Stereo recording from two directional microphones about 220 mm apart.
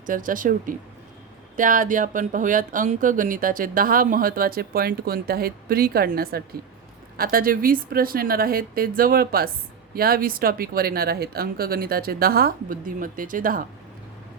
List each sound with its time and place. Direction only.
0.0 s speech: 35° right (ahead or behind)